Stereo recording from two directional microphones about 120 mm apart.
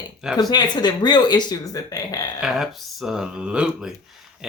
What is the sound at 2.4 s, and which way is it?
Speech, 5° right (ahead or behind).